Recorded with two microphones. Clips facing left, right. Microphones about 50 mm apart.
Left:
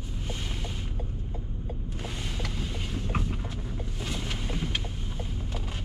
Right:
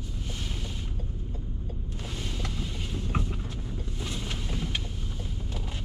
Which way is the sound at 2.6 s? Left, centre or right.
Centre.